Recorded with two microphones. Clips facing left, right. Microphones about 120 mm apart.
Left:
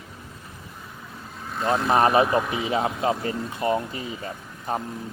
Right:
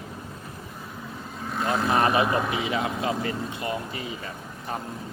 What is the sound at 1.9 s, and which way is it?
Speech, 40° left (ahead or behind).